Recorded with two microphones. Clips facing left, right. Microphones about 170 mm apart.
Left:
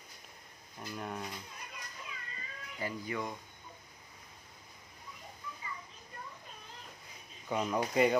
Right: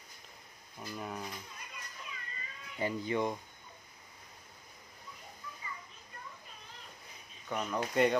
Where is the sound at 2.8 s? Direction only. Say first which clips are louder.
Right 5 dB; 25° right (ahead or behind).